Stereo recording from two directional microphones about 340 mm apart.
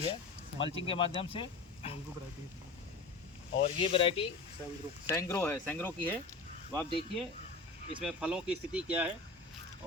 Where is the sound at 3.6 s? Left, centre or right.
Centre.